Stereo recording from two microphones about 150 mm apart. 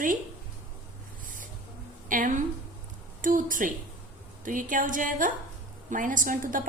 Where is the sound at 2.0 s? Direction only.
60° right (ahead or behind).